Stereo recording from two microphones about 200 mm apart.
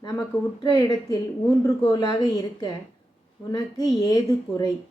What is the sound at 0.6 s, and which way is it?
A woman's voice, 20° left (ahead or behind).